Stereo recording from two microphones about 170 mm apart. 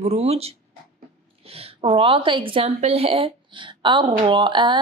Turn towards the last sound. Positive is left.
turn(degrees=-30)  # may be behind; listen again after turning